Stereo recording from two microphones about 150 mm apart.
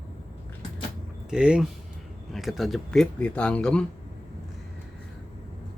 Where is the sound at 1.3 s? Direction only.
5° right (ahead or behind).